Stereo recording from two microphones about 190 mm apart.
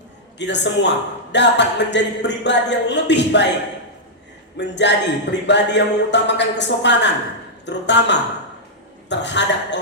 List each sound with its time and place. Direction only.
0.3 s speech: 65° left (ahead or behind)
4.5 s speech: 65° left (ahead or behind)